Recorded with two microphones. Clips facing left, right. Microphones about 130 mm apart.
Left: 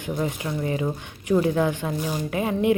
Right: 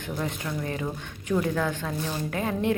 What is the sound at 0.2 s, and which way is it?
Speech, 15° left (ahead or behind).